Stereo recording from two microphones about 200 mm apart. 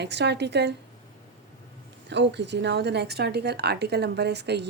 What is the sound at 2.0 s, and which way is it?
Speech, 60° right (ahead or behind).